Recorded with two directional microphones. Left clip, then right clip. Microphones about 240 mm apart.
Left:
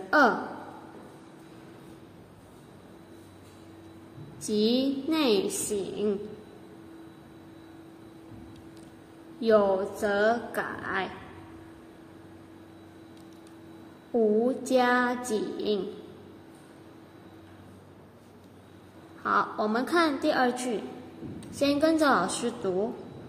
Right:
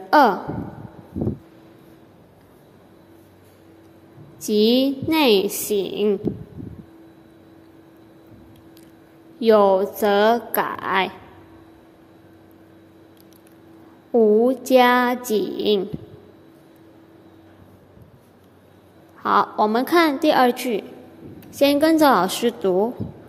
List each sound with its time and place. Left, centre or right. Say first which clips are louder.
0.1 s a sound: right 7 dB; right
4.4 s a woman's voice: right 9 dB; right
9.4 s a woman's voice: right 8 dB; right
14.1 s a woman's voice: right 9 dB; right
19.2 s a woman's voice: right 8 dB; right